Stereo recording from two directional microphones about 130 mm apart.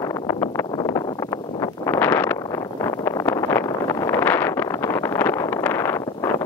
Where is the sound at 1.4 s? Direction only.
40° left (ahead or behind).